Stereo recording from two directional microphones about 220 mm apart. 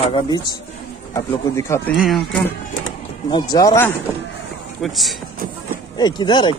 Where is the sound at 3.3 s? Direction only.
15° left (ahead or behind).